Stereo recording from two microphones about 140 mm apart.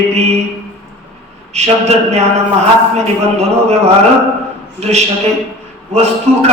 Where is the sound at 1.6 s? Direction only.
50° right (ahead or behind).